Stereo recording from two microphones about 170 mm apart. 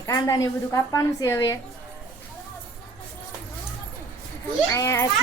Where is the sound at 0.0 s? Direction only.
20° left (ahead or behind).